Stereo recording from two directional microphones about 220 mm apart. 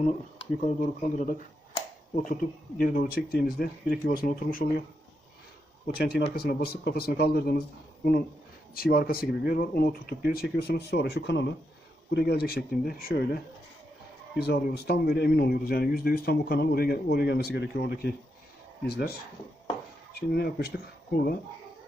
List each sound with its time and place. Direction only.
0.0 s speech: 30° left (ahead or behind)
2.8 s speech: 40° left (ahead or behind)
5.9 s speech: 45° left (ahead or behind)
14.4 s speech: 45° left (ahead or behind)
20.2 s speech: 45° left (ahead or behind)